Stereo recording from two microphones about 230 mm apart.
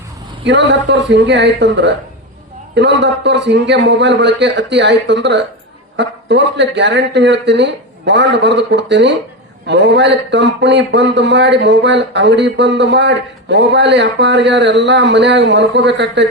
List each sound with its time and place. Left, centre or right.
0.4 s speech: right